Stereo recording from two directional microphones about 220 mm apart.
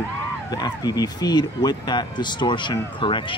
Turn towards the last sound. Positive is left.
turn(degrees=20)  # may be behind; listen again after turning